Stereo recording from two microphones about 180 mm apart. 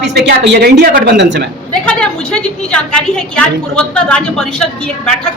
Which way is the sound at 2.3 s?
5° left (ahead or behind).